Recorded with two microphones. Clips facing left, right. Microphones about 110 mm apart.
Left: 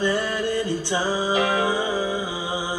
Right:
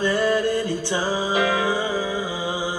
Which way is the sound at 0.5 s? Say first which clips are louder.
Right 1 dB; 50° right (ahead or behind).